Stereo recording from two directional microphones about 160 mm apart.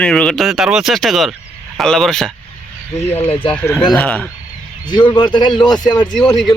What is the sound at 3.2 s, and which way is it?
Speech, 35° left (ahead or behind).